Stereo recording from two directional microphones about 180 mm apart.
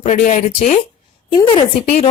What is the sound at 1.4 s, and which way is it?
Speech, 30° left (ahead or behind).